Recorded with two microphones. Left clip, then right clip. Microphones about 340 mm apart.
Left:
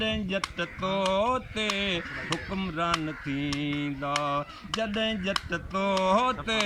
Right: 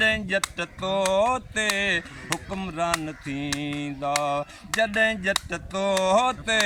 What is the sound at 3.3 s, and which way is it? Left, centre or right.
Mantra, right.